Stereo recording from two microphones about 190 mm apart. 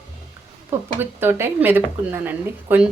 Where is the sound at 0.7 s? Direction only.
10° right (ahead or behind).